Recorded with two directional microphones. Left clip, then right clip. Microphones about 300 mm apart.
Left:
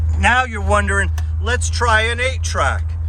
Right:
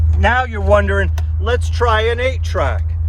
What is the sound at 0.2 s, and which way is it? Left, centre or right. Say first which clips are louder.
Speech: even; centre.